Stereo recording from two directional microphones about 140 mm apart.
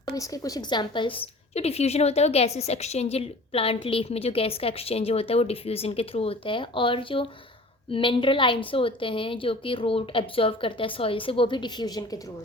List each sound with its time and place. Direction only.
0.0 s a woman's voice: 25° left (ahead or behind)